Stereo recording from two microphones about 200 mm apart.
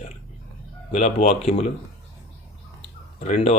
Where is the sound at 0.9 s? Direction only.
35° left (ahead or behind).